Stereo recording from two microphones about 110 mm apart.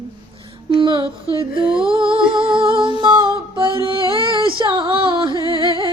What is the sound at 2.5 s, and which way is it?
Music, 45° right (ahead or behind).